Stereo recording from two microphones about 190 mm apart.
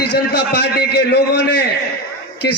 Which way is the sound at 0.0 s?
60° left (ahead or behind).